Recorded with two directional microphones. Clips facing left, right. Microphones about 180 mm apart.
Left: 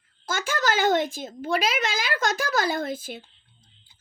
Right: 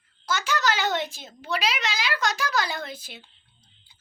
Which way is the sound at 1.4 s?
50° left (ahead or behind).